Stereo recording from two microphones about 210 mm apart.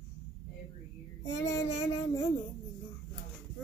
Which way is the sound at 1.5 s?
55° left (ahead or behind).